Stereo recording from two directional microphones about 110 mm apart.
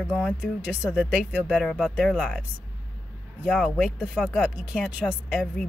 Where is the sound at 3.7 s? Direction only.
5° right (ahead or behind).